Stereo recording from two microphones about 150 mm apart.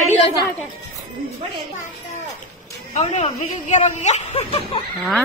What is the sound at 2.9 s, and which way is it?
Speech, 50° left (ahead or behind).